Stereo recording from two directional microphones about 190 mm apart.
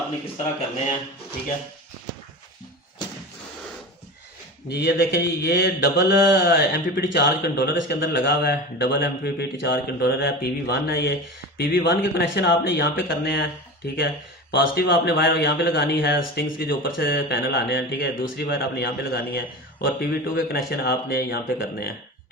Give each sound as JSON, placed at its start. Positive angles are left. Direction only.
{"t": 4.7, "sound": "a man's voice", "side_deg": 60}